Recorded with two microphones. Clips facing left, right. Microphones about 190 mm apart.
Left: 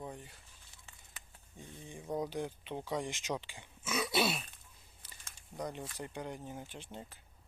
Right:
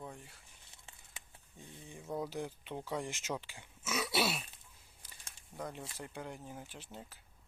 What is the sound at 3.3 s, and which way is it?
Speech, 15° left (ahead or behind).